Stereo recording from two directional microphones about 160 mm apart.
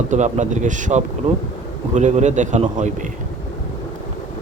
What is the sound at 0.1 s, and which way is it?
Speech, 50° right (ahead or behind).